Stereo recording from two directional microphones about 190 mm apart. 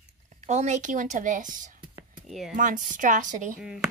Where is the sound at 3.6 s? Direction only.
5° right (ahead or behind).